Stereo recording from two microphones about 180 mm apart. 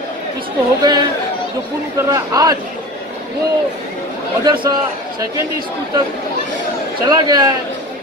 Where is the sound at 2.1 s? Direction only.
20° right (ahead or behind).